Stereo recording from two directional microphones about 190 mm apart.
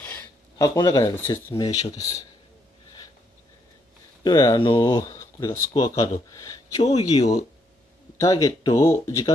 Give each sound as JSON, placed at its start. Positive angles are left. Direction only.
{"t": 0.0, "sound": "a sound", "side_deg": 15}
{"t": 1.5, "sound": "speech", "side_deg": 20}
{"t": 4.2, "sound": "speech", "side_deg": 20}